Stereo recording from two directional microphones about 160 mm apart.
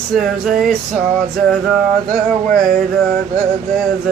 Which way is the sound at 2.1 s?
55° right (ahead or behind).